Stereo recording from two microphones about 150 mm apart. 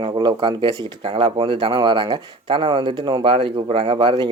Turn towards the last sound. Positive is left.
turn(degrees=-30)  # may be behind; listen again after turning